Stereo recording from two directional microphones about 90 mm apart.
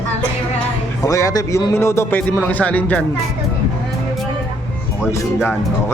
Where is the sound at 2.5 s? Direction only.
20° left (ahead or behind).